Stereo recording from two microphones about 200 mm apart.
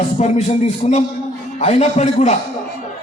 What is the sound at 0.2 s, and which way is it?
A man's voice, 35° left (ahead or behind).